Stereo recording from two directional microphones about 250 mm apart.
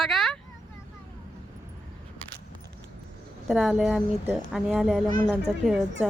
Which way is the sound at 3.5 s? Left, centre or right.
Centre.